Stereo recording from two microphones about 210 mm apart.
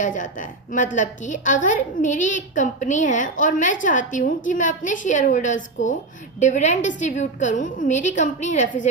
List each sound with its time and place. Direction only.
0.0 s a woman's voice: 35° left (ahead or behind)